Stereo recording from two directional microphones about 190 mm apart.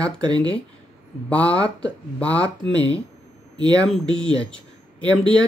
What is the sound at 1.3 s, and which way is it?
Speech, 5° left (ahead or behind).